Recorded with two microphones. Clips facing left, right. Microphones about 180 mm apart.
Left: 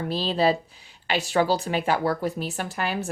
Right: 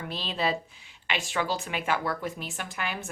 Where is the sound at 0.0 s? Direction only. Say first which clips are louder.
Left 8 dB; 35° left (ahead or behind).